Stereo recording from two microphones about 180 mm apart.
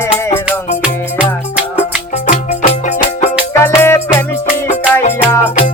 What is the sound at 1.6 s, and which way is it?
Music, 5° right (ahead or behind).